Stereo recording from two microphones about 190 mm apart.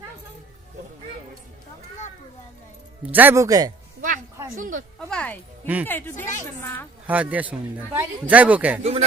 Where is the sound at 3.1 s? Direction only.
10° right (ahead or behind).